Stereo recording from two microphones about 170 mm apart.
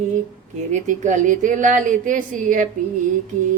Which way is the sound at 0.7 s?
45° right (ahead or behind).